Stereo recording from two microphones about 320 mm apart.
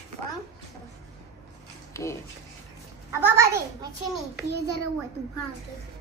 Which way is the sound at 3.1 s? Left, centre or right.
Centre.